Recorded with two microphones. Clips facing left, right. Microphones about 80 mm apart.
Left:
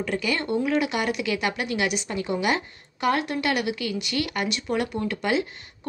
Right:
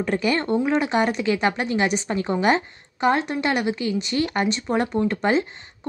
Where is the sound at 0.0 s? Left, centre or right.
Right.